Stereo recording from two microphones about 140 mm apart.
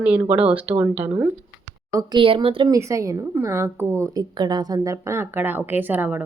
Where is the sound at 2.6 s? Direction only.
20° right (ahead or behind).